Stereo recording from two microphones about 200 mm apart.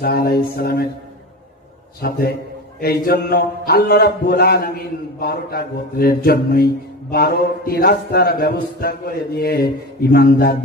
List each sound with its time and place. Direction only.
0.0 s a man's voice: 50° left (ahead or behind)
2.0 s a man's voice: 50° left (ahead or behind)